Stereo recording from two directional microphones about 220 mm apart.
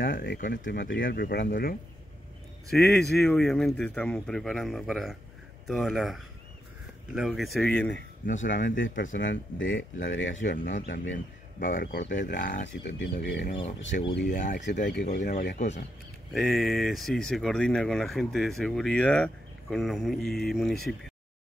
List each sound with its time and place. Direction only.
0.0 s speech: 40° left (ahead or behind)
2.7 s speech: centre (ahead or behind)
8.3 s speech: 35° left (ahead or behind)
8.6 s speech: 55° left (ahead or behind)
10.4 s speech: 35° left (ahead or behind)
14.9 s speech: 50° left (ahead or behind); by 15.8 s 35° left (ahead or behind)
16.3 s speech: centre (ahead or behind)